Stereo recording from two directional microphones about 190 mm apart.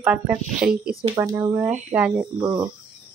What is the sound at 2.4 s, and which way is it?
Cricket, 25° right (ahead or behind).